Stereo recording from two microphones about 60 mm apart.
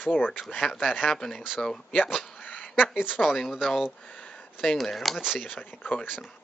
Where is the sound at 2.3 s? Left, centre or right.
Left.